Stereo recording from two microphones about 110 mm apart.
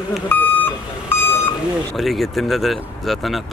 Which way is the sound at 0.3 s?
15° left (ahead or behind).